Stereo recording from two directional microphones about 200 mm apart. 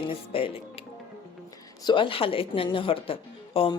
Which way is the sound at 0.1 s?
25° left (ahead or behind).